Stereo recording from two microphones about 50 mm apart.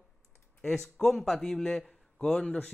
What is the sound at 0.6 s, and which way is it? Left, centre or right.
A man's voice, centre.